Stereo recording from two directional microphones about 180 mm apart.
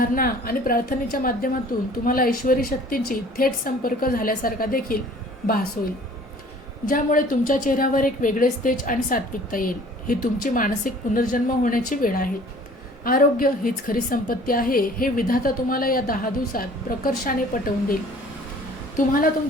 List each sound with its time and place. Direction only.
0.0 s a woman's voice: 55° left (ahead or behind)
6.8 s a woman's voice: 50° left (ahead or behind)
18.9 s a woman's voice: 50° left (ahead or behind)